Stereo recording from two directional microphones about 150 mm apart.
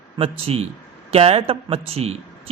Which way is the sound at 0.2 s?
40° right (ahead or behind).